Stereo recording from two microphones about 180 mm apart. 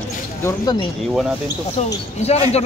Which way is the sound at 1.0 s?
Centre (ahead or behind).